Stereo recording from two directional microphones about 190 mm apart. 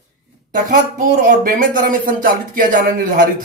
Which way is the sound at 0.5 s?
45° right (ahead or behind).